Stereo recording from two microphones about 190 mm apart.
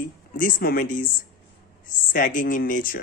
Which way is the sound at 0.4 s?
50° left (ahead or behind).